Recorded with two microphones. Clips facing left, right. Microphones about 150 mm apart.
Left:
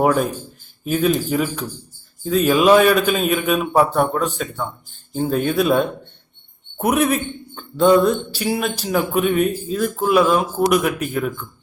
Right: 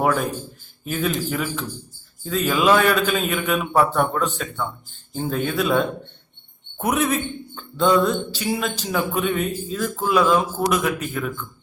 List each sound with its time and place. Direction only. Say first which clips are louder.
0.9 s speech: left 5 dB; 15° left (ahead or behind)